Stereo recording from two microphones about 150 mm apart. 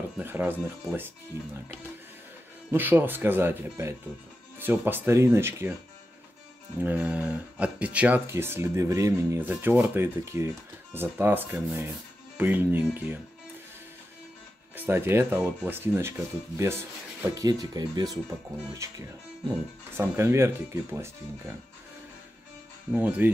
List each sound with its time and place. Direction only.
0.2 s speech: 15° right (ahead or behind)
2.7 s speech: 15° right (ahead or behind)
6.8 s speech: 10° right (ahead or behind)
14.8 s speech: 15° right (ahead or behind)
20.0 s speech: 15° right (ahead or behind)
22.9 s speech: 15° right (ahead or behind)